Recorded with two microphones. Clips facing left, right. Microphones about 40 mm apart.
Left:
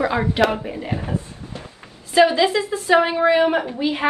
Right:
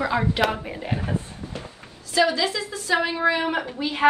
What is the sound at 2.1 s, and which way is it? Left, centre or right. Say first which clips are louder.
A woman's voice: left 6 dB; left.